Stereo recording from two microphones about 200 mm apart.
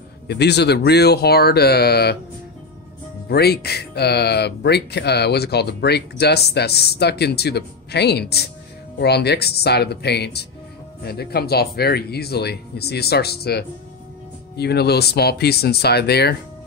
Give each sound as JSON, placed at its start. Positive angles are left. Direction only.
{"t": 0.3, "sound": "speech", "side_deg": 55}
{"t": 3.3, "sound": "speech", "side_deg": 55}